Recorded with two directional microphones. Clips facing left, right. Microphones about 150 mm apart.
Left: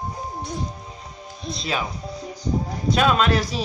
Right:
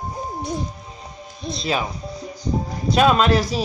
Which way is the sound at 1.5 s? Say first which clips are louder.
Right 3 dB; centre (ahead or behind).